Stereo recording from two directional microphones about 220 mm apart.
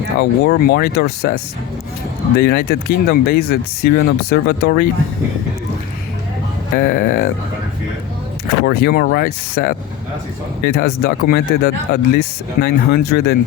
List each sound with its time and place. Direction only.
0.2 s speech: 50° left (ahead or behind)
2.4 s speech: 45° left (ahead or behind)
6.7 s speech: 40° left (ahead or behind)
8.6 s speech: 45° left (ahead or behind)